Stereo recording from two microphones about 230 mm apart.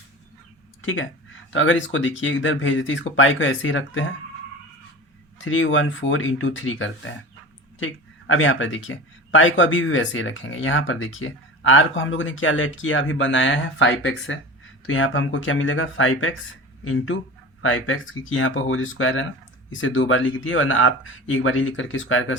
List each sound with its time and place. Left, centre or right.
1.5 s speech: left
5.5 s speech: left
8.3 s speech: left